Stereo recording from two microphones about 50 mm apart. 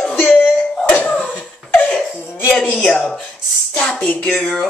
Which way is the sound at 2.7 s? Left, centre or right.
Centre.